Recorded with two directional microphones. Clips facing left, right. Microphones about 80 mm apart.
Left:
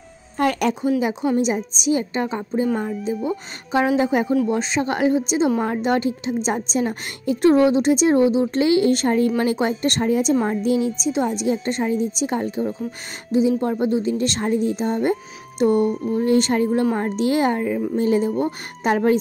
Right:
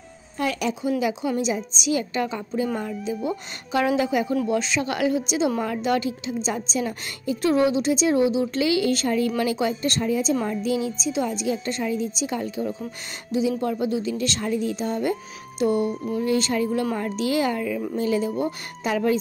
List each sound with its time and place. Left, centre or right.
0.4 s speech: left
0.8 s speech: left
3.7 s a woman's voice: left
15.8 s speech: centre
16.2 s a woman's voice: left